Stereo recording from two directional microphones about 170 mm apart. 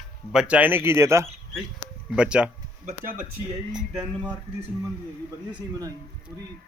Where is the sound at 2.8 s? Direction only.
45° right (ahead or behind).